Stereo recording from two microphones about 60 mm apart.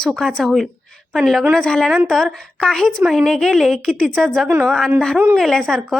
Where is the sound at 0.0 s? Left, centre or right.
Centre.